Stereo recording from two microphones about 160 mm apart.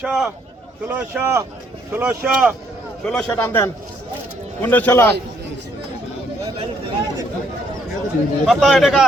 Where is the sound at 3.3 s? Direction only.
15° left (ahead or behind).